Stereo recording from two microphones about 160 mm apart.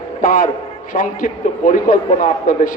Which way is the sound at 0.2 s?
55° left (ahead or behind).